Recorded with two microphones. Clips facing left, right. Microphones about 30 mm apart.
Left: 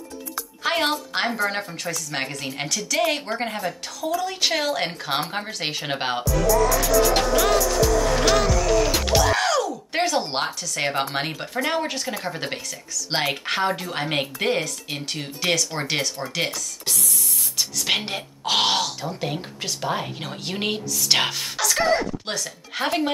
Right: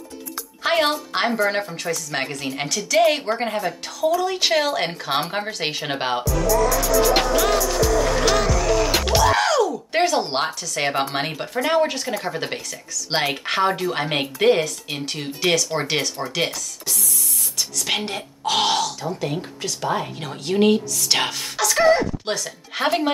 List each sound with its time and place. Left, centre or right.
0.7 s music: centre
1.1 s speech: centre
7.2 s music: centre
11.1 s speech: centre
16.8 s printer: left
17.6 s speech: centre